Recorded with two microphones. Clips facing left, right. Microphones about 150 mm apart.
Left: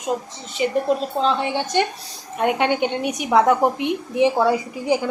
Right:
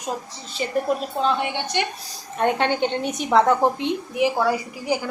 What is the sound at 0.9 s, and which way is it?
Speech, 30° left (ahead or behind).